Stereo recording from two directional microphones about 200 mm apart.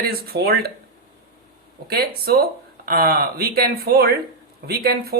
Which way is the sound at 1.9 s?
50° right (ahead or behind).